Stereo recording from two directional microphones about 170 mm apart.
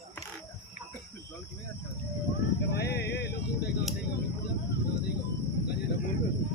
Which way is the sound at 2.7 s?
75° left (ahead or behind).